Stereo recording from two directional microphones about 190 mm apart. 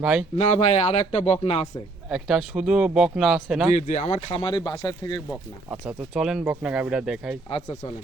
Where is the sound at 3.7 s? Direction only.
40° left (ahead or behind); by 5.2 s 20° left (ahead or behind).